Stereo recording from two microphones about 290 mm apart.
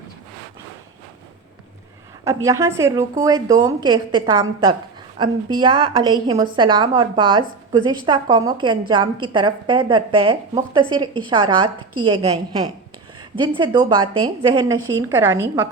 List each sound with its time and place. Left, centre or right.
2.2 s a woman's voice: centre